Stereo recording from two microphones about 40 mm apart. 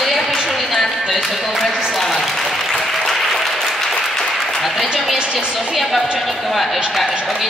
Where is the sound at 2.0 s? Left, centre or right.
Centre.